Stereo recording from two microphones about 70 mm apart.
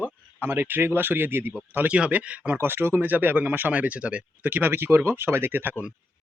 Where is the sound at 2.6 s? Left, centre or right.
Right.